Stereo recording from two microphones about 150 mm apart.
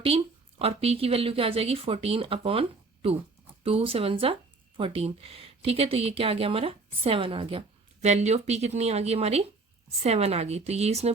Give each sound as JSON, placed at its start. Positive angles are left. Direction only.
{"t": 0.6, "sound": "speech", "side_deg": -40}
{"t": 8.0, "sound": "speech", "side_deg": -50}